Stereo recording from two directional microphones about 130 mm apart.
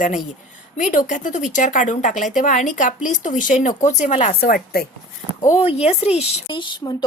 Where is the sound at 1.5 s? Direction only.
75° left (ahead or behind).